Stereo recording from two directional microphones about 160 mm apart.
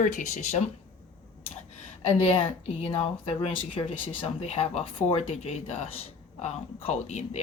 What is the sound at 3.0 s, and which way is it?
Speech, 40° left (ahead or behind).